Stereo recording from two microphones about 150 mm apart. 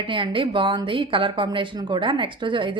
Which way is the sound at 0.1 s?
35° right (ahead or behind).